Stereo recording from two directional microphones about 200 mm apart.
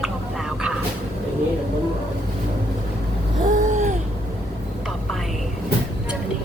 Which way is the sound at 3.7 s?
35° right (ahead or behind).